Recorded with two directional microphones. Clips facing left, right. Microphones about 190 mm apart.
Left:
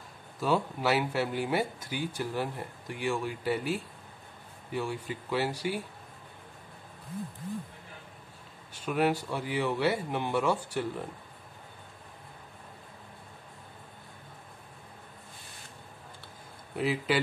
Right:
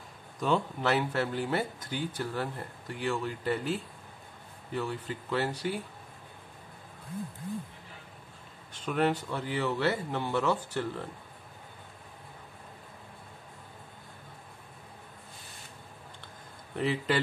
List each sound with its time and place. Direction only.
0.4 s speech: 5° left (ahead or behind)
8.7 s speech: 10° left (ahead or behind)
16.7 s speech: 5° left (ahead or behind)